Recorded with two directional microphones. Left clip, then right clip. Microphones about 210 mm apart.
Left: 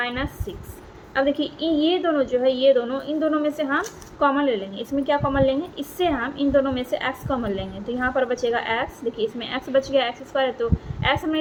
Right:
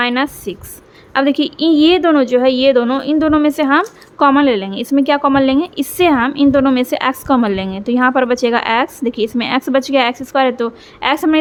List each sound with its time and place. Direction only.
0.0 s a woman's voice: 50° right (ahead or behind)